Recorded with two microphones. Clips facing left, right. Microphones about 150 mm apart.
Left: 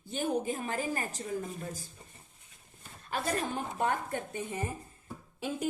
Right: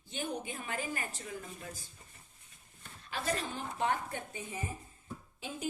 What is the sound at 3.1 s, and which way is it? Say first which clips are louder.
A woman's voice: left 4 dB; 50° left (ahead or behind).